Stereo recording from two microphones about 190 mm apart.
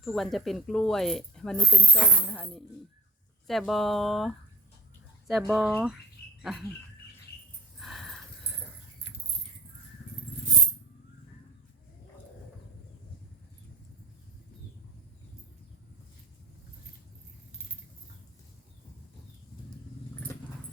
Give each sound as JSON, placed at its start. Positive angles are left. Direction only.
{"t": 0.0, "sound": "speech", "side_deg": 0}
{"t": 6.4, "sound": "rodents", "side_deg": 0}
{"t": 7.8, "sound": "a sound", "side_deg": 0}